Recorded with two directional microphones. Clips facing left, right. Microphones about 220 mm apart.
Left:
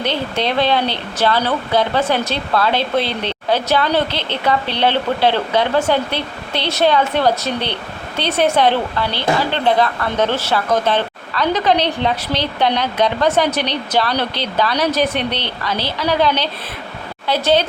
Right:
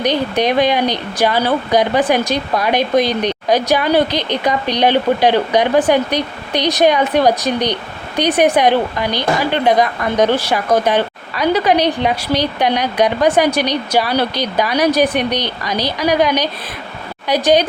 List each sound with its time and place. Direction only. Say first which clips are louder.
0.0 s speech: right 4 dB; 15° right (ahead or behind)